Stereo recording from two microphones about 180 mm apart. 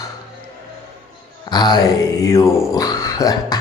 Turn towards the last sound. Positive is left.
turn(degrees=20)  # may be behind; listen again after turning